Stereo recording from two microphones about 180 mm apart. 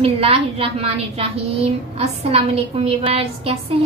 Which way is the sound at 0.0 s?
30° right (ahead or behind).